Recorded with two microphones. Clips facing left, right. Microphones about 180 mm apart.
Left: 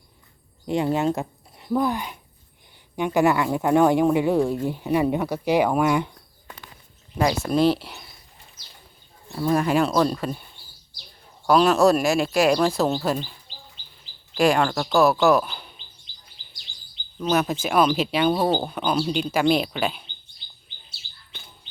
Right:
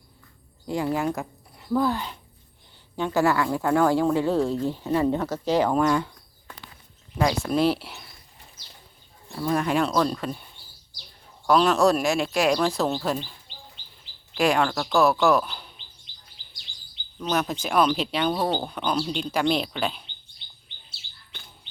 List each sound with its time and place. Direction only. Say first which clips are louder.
0.7 s speech: left 3 dB; 25° left (ahead or behind)
7.2 s speech: left 2 dB; 5° left (ahead or behind)
9.4 s speech: left 3 dB; 5° left (ahead or behind)
11.4 s speech: left 2 dB; 5° left (ahead or behind)
14.3 s speech: left 2 dB; centre (ahead or behind)
17.2 s speech: left 4 dB; 5° left (ahead or behind)